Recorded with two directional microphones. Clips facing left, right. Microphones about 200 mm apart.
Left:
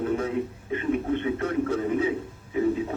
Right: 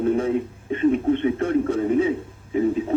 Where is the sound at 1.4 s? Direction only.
30° right (ahead or behind).